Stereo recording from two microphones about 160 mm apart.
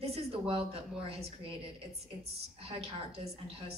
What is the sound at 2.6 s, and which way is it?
Speech, 40° right (ahead or behind).